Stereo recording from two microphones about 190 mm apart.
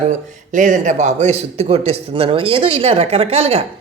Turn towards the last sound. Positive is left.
turn(degrees=-30)  # may be behind; listen again after turning